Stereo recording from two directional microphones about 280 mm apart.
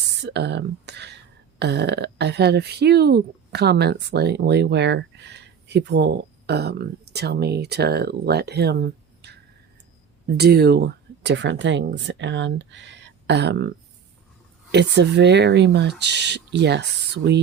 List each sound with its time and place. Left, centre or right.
0.2 s speech: right